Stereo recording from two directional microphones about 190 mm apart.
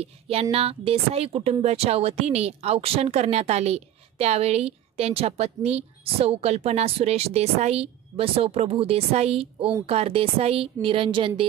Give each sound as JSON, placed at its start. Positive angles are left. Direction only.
{"t": 0.0, "sound": "a woman's voice", "side_deg": -30}